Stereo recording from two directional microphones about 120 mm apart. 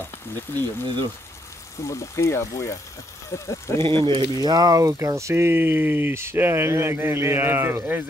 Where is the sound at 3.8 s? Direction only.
45° right (ahead or behind).